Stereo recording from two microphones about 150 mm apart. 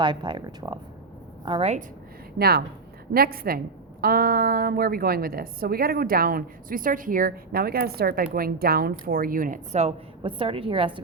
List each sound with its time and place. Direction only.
0.0 s a woman's voice: 30° right (ahead or behind)
2.4 s a woman's voice: 90° right; by 9.6 s 65° right (ahead or behind)
9.7 s a woman's voice: 40° right (ahead or behind)